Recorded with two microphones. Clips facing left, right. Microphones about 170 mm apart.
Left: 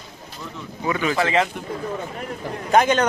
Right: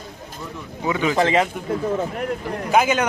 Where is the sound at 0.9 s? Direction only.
15° right (ahead or behind).